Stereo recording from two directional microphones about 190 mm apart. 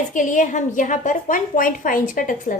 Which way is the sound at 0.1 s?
40° left (ahead or behind).